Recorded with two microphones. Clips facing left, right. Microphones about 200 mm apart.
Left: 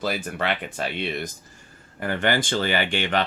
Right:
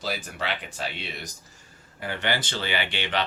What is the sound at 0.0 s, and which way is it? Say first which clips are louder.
Speech: left 5 dB; 55° left (ahead or behind).